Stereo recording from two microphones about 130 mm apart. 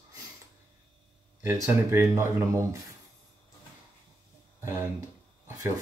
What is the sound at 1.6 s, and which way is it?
Speech, 20° right (ahead or behind).